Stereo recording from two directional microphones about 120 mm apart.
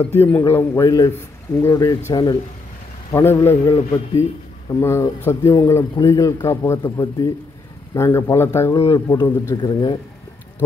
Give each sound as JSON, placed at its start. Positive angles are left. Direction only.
{"t": 0.0, "sound": "a man's voice", "side_deg": 15}
{"t": 3.1, "sound": "a man's voice", "side_deg": 25}
{"t": 4.7, "sound": "a man's voice", "side_deg": 20}